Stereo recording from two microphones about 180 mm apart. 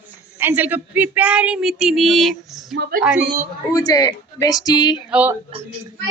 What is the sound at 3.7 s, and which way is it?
Speech, 20° left (ahead or behind).